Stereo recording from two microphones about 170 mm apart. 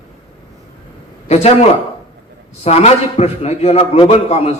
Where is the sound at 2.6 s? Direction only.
40° left (ahead or behind).